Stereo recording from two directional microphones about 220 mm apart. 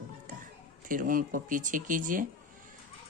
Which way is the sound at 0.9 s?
40° right (ahead or behind).